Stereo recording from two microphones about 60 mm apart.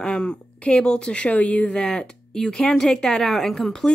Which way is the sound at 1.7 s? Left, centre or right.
Centre.